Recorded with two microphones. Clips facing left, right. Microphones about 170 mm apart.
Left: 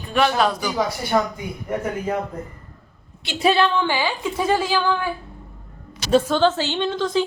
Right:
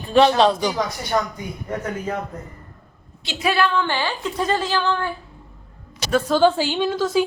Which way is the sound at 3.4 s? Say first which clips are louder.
Left 2 dB; 20° left (ahead or behind).